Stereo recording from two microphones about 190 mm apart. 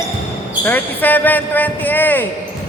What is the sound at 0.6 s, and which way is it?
Speech, 10° left (ahead or behind).